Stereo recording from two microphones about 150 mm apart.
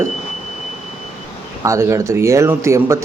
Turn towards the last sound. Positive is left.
turn(degrees=-20)  # may be behind; listen again after turning